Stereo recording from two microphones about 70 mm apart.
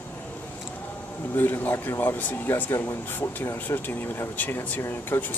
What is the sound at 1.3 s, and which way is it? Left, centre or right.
Speech, left.